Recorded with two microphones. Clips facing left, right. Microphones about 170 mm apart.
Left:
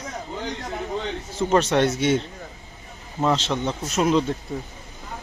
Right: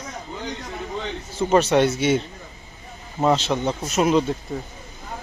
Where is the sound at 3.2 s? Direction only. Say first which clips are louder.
Right 2 dB; 10° right (ahead or behind).